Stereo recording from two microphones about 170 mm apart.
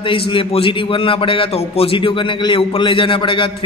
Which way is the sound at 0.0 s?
30° left (ahead or behind).